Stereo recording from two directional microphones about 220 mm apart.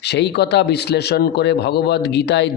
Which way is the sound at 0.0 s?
50° left (ahead or behind).